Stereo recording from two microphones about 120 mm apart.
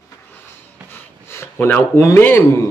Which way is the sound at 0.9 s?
20° left (ahead or behind).